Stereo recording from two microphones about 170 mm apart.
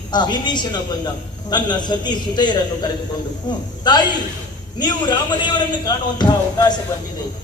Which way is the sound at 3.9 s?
25° left (ahead or behind).